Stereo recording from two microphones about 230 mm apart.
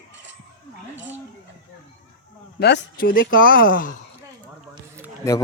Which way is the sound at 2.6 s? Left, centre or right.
Left.